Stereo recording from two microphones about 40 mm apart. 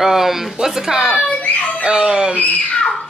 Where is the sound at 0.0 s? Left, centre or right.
Centre.